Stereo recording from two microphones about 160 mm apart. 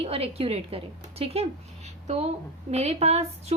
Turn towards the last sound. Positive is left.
turn(degrees=-40)  # may be behind; listen again after turning